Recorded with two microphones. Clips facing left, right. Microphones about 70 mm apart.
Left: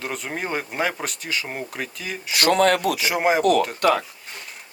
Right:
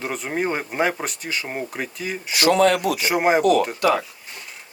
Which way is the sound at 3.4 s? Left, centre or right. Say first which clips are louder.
Right 1 dB; left.